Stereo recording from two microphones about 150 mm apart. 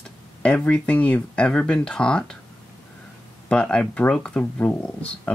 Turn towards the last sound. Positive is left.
turn(degrees=10)  # may be behind; listen again after turning